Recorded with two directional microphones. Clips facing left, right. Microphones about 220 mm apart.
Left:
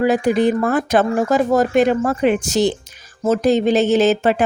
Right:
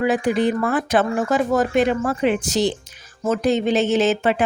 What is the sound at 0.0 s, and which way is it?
Speech, 40° left (ahead or behind).